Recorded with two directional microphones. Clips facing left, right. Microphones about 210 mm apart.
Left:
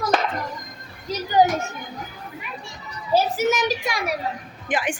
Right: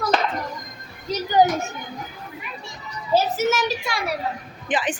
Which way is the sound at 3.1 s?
15° left (ahead or behind).